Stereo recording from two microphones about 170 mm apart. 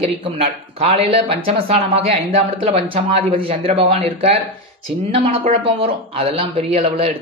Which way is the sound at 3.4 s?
35° right (ahead or behind).